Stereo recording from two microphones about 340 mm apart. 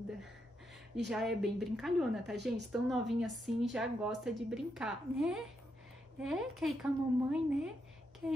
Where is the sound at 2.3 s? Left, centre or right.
Right.